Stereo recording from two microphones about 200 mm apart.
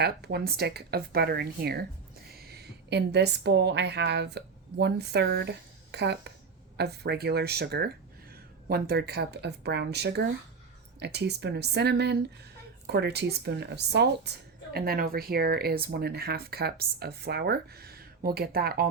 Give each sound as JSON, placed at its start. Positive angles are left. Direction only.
{"t": 0.0, "sound": "a woman's voice", "side_deg": -55}